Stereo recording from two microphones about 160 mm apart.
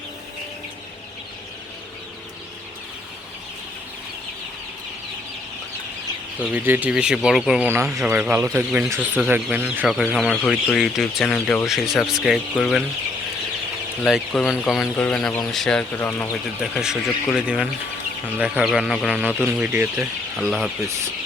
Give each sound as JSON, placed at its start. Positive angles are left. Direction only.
{"t": 6.4, "sound": "speech", "side_deg": -10}
{"t": 14.1, "sound": "speech", "side_deg": -5}
{"t": 16.7, "sound": "speech", "side_deg": -5}
{"t": 20.3, "sound": "speech", "side_deg": 0}